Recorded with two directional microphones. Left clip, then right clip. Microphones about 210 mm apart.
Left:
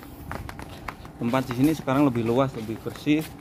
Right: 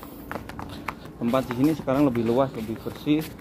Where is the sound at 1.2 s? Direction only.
50° left (ahead or behind).